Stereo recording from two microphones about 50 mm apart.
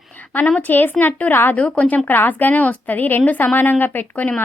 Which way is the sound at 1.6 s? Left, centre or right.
Left.